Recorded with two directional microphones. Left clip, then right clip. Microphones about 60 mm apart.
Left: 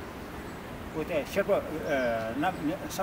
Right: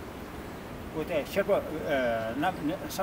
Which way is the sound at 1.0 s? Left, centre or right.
Centre.